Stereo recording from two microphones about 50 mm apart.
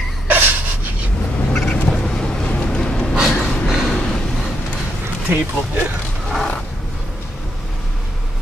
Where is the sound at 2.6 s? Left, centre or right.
Centre.